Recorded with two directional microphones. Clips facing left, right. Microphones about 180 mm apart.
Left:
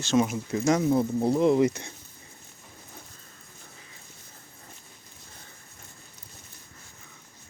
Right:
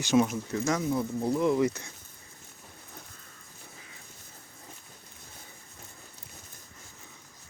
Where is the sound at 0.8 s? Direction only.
30° left (ahead or behind).